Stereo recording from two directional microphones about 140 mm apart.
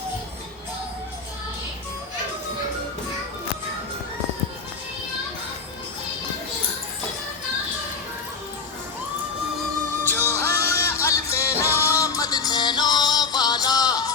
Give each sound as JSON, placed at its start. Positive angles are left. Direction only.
{"t": 10.0, "sound": "music", "side_deg": 15}